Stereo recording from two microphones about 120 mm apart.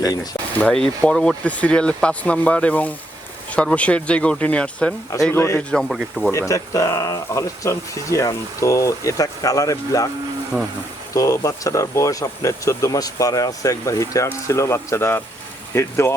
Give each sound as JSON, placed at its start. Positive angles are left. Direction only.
{"t": 0.6, "sound": "speech", "side_deg": 10}
{"t": 5.3, "sound": "speech", "side_deg": 20}
{"t": 5.7, "sound": "speech", "side_deg": 0}
{"t": 6.5, "sound": "speech", "side_deg": 30}
{"t": 10.5, "sound": "speech", "side_deg": 10}
{"t": 11.1, "sound": "speech", "side_deg": 25}